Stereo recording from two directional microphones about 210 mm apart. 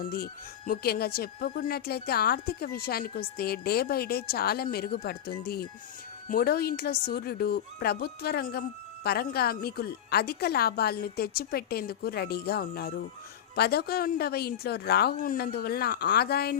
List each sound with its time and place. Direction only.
0.1 s a woman's voice: 45° left (ahead or behind)